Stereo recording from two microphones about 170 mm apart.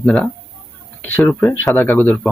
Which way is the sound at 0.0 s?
5° left (ahead or behind).